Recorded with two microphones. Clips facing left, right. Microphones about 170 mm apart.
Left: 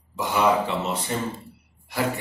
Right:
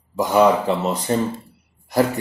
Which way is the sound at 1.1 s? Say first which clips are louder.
Right 10 dB; 40° right (ahead or behind).